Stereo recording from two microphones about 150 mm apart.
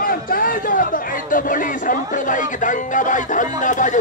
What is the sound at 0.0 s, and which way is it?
Speech, 70° left (ahead or behind).